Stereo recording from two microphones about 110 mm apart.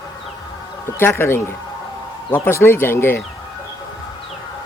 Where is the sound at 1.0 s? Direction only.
20° left (ahead or behind).